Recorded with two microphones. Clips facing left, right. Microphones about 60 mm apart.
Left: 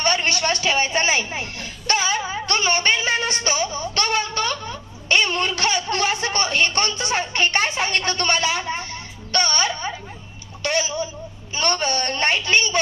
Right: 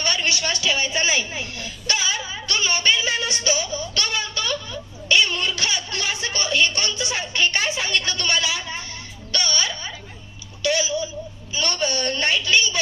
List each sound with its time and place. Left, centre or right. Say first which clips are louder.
0.0 s a woman's voice: left 3 dB; left
10.6 s a sound: right 1 dB; left
11.5 s a woman's voice: left 2 dB; left